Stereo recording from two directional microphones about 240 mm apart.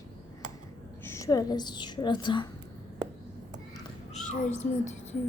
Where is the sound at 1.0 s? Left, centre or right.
Centre.